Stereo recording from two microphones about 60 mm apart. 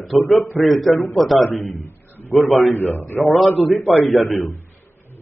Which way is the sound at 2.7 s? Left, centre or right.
Left.